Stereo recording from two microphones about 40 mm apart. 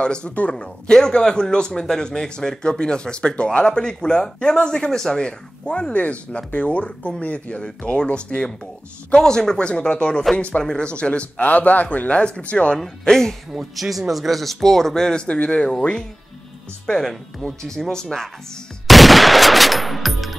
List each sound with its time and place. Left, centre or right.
0.0 s a man's voice: left
5.9 s speech: left
9.1 s speech: centre
9.6 s a man's voice: left
11.3 s a man's voice: left
13.1 s speech: centre
13.5 s speech: centre
15.2 s speech: left
16.9 s speech: centre
18.9 s gunshot: centre